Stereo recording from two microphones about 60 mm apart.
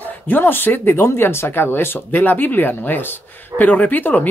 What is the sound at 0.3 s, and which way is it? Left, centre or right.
Speech, left.